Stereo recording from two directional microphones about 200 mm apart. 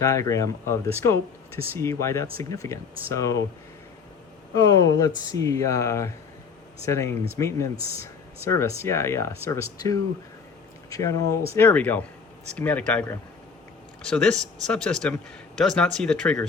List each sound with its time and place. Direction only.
0.0 s speech: 15° left (ahead or behind)
4.5 s speech: 15° left (ahead or behind)